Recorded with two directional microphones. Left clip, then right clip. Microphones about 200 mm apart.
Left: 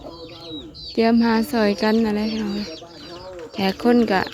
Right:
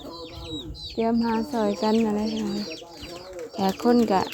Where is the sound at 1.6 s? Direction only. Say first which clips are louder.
Left 2 dB; 20° left (ahead or behind).